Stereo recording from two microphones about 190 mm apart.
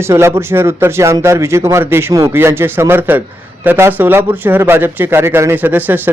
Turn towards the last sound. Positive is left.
turn(degrees=-10)  # may be behind; listen again after turning